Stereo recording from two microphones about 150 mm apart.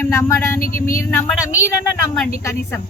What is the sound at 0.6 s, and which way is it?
Speech, 70° left (ahead or behind).